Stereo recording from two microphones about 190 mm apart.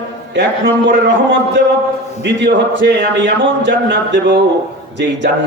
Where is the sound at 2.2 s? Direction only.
70° right (ahead or behind).